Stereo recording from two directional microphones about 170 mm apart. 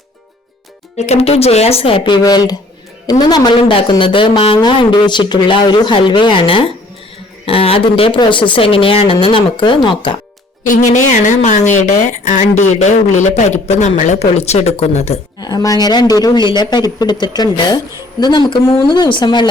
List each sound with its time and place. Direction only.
0.9 s a woman's voice: 40° left (ahead or behind)
10.6 s a woman's voice: 45° left (ahead or behind)
15.4 s a woman's voice: 25° left (ahead or behind)